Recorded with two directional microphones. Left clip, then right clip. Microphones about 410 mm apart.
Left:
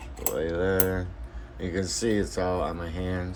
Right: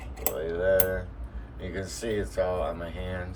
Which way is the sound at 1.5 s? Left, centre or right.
Centre.